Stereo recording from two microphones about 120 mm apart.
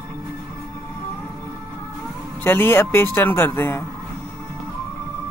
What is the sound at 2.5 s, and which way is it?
Speech, 20° left (ahead or behind).